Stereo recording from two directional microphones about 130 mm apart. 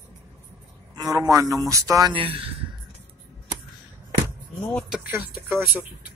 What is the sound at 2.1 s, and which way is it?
Speech, 45° right (ahead or behind).